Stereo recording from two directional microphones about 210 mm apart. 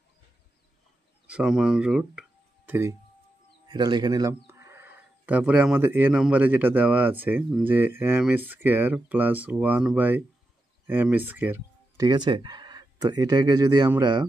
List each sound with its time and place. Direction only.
1.2 s speech: 5° right (ahead or behind)
12.1 s speech: 20° right (ahead or behind)